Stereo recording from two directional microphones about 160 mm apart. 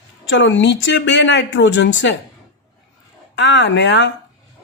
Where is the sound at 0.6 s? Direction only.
90° left.